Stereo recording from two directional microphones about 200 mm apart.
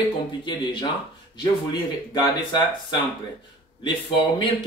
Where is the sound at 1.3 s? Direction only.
20° left (ahead or behind).